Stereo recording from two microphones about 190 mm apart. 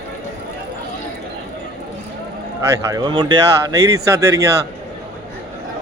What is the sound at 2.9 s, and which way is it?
Speech, 25° right (ahead or behind).